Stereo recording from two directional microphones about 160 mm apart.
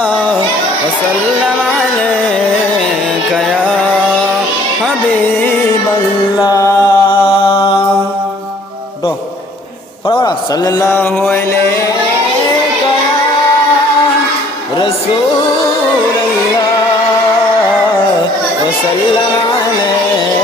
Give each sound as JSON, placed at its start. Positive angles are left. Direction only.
{"t": 6.4, "sound": "music", "side_deg": 20}
{"t": 7.3, "sound": "music", "side_deg": 35}
{"t": 10.1, "sound": "a man's voice", "side_deg": 25}